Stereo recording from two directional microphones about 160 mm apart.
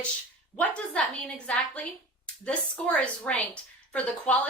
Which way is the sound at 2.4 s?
5° left (ahead or behind).